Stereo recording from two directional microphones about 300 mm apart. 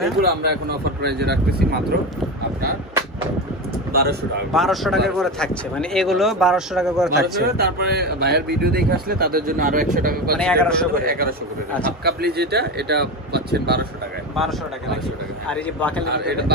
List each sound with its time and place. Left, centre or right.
0.2 s speech: right
3.9 s speech: right
4.5 s speech: centre
7.4 s speech: right
10.4 s speech: centre
11.1 s speech: right
16.1 s speech: right